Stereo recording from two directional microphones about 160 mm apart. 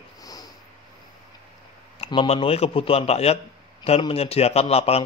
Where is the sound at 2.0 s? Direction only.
35° left (ahead or behind).